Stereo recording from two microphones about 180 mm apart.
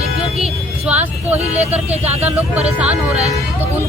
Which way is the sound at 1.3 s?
35° right (ahead or behind).